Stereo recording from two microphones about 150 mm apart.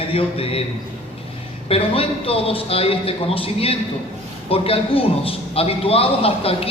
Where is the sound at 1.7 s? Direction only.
40° left (ahead or behind).